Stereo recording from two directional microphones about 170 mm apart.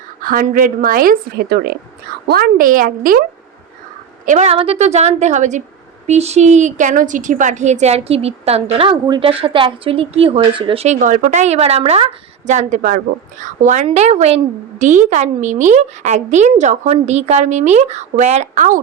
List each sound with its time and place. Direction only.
0.2 s speech: 55° right (ahead or behind)
4.3 s a woman's voice: 40° right (ahead or behind)